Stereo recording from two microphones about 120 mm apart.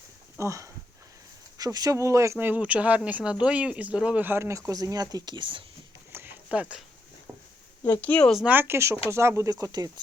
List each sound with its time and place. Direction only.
0.3 s speech: 25° right (ahead or behind); by 5.6 s 45° right (ahead or behind)
6.1 s a sound: 20° right (ahead or behind)
8.0 s speech: 10° left (ahead or behind)
8.4 s speech: 15° right (ahead or behind)